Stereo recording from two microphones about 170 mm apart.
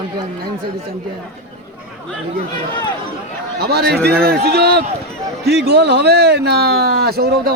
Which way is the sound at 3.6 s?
70° right (ahead or behind).